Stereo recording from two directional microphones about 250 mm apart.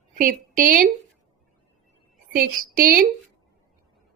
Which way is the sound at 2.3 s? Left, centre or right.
Right.